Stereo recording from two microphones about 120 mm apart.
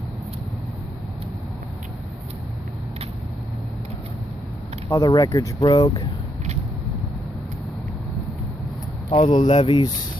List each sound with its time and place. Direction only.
4.9 s speech: 35° left (ahead or behind)
5.7 s speech: 40° left (ahead or behind)
9.1 s speech: 40° left (ahead or behind)